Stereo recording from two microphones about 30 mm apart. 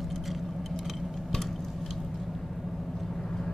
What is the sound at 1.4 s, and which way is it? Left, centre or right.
Tick-tock, centre.